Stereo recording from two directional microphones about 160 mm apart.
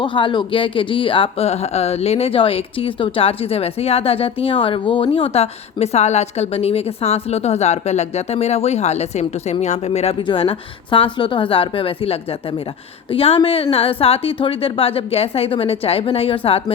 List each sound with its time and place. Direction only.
0.0 s speech: 30° left (ahead or behind)